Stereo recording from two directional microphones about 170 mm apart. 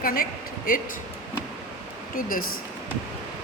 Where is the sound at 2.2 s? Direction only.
55° left (ahead or behind).